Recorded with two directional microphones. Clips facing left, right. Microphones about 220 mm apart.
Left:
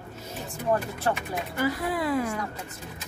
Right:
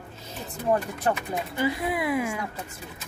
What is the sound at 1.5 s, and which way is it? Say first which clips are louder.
Speech: even; 20° right (ahead or behind).